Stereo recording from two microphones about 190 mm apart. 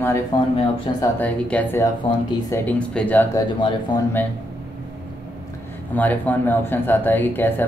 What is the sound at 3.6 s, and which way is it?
Speech, 25° left (ahead or behind).